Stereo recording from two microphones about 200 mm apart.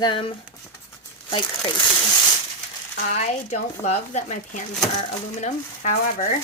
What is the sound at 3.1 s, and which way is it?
Speech, 35° left (ahead or behind).